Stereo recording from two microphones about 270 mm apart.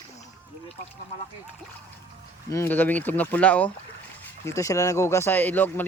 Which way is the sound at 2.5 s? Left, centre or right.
Centre.